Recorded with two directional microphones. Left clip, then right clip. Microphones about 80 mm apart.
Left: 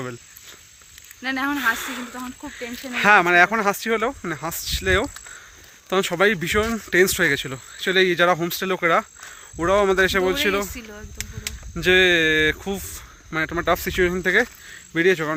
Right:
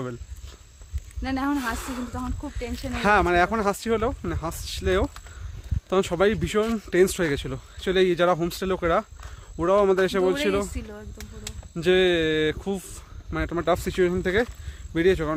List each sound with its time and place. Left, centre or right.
1.2 s speech: right
1.5 s speech: centre
11.7 s speech: centre